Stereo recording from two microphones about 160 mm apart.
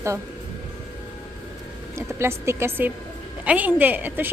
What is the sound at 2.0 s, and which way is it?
A woman's voice, 15° right (ahead or behind).